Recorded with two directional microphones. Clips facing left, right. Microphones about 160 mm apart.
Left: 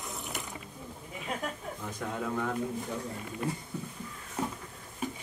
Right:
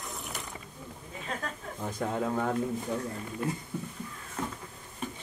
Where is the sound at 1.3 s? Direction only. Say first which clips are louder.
Left 1 dB; 10° left (ahead or behind).